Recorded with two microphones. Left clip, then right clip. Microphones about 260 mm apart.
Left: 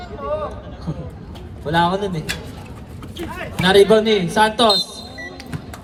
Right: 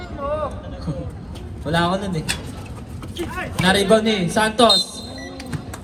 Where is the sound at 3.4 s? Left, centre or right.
Left.